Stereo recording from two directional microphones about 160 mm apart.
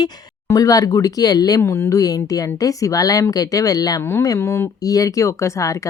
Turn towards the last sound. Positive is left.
turn(degrees=20)  # may be behind; listen again after turning